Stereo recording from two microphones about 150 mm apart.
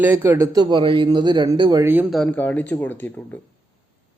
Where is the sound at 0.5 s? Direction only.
30° right (ahead or behind).